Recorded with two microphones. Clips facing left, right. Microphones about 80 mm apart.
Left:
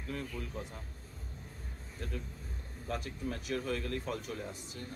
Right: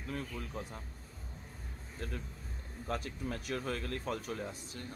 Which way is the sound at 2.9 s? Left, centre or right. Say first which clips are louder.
Even; right.